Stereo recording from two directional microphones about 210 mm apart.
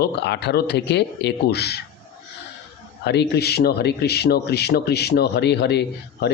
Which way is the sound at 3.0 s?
55° left (ahead or behind).